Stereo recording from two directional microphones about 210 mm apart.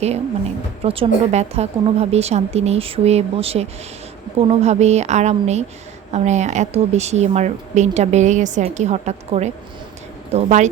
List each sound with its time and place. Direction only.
0.9 s a woman's voice: 30° right (ahead or behind)